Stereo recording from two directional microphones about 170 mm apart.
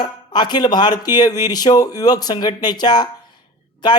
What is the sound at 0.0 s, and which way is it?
A man's voice, 25° left (ahead or behind).